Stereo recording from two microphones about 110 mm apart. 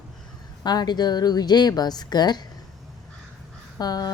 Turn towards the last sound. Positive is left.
turn(degrees=40)  # may be behind; listen again after turning